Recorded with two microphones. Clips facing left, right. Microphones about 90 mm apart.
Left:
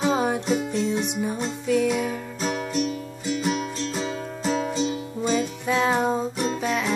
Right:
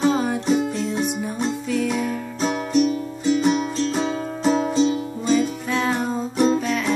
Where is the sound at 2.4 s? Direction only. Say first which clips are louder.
Right 6 dB; 20° right (ahead or behind); by 5.0 s 40° right (ahead or behind).